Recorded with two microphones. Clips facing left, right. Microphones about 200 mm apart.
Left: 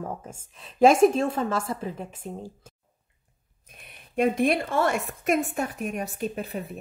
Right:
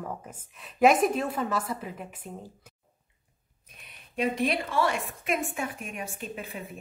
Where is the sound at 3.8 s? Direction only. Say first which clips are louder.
Left 5 dB; 50° left (ahead or behind).